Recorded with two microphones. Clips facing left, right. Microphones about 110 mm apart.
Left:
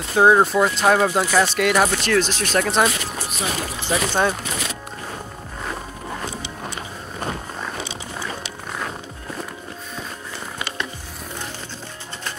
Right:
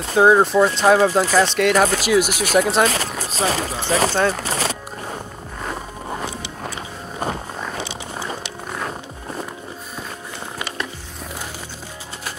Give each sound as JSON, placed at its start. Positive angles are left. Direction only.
{"t": 0.1, "sound": "speech", "side_deg": 0}
{"t": 2.0, "sound": "speech", "side_deg": -10}
{"t": 2.9, "sound": "speech", "side_deg": -35}
{"t": 7.9, "sound": "wild animals", "side_deg": -10}